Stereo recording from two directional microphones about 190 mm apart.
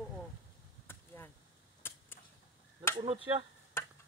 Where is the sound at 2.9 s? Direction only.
25° right (ahead or behind).